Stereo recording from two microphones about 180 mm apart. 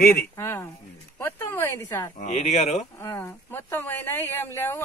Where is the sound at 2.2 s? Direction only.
40° left (ahead or behind).